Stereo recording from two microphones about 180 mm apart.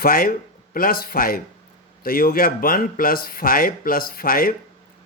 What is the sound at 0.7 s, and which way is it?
Speech, 55° left (ahead or behind).